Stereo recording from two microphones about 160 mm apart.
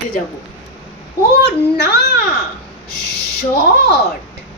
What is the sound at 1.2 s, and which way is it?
A woman's voice, 90° left.